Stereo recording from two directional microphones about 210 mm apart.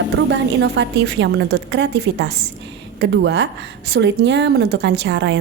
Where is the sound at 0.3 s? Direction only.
60° right (ahead or behind).